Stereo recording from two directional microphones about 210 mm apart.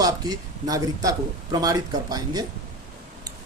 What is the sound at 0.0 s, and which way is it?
A man's voice, 15° right (ahead or behind).